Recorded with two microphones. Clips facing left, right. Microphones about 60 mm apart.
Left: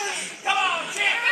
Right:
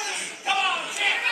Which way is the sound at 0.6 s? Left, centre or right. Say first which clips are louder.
Left 1 dB; centre.